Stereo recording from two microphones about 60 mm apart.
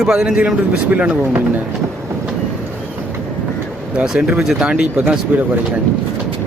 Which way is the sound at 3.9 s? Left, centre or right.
Centre.